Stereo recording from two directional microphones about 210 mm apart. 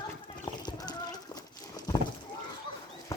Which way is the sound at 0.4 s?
20° left (ahead or behind).